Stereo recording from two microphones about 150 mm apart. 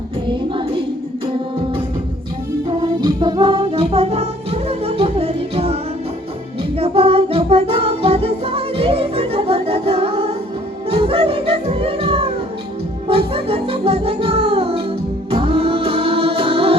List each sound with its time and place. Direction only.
0.3 s music: 35° right (ahead or behind)
2.6 s music: 30° right (ahead or behind)